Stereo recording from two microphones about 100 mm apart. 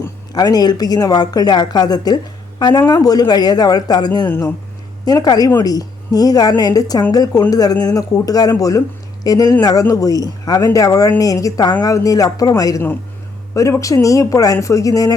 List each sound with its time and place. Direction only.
0.3 s speech: 40° left (ahead or behind)
4.3 s speech: 20° left (ahead or behind)
5.0 s speech: 45° left (ahead or behind)